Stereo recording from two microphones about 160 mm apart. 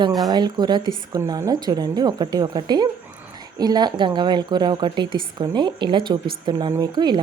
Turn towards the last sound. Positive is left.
turn(degrees=-25)  # may be behind; listen again after turning